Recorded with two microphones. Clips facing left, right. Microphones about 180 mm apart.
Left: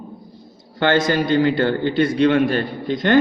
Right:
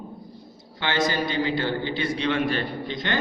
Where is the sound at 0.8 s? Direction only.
50° left (ahead or behind).